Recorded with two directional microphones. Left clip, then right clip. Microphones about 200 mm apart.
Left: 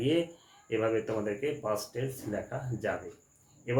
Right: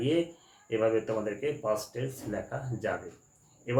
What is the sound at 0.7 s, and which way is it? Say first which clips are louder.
Speech: right 2 dB; 10° left (ahead or behind).